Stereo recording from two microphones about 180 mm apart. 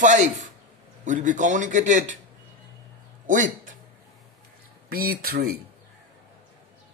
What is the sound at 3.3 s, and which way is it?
Speech, 45° right (ahead or behind).